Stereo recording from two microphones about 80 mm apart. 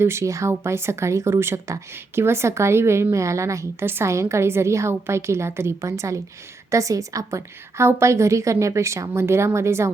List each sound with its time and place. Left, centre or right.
0.0 s speech: right